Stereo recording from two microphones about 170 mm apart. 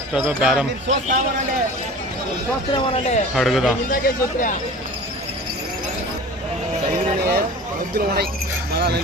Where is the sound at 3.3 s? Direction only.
Centre (ahead or behind).